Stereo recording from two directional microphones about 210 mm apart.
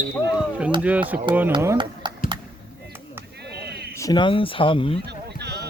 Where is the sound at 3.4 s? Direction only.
50° right (ahead or behind).